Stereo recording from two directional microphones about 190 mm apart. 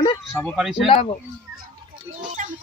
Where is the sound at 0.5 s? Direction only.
Centre (ahead or behind).